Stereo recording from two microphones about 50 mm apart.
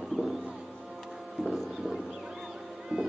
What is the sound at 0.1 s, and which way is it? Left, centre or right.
Music, centre.